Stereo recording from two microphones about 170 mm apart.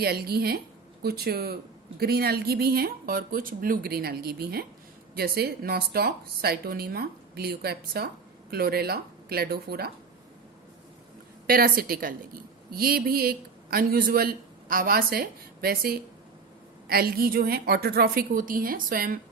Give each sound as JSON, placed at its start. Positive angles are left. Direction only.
{"t": 0.0, "sound": "a woman's voice", "side_deg": -65}
{"t": 11.4, "sound": "speech", "side_deg": -60}